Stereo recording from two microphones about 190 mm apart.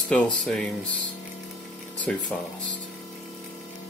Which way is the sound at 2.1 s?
5° left (ahead or behind).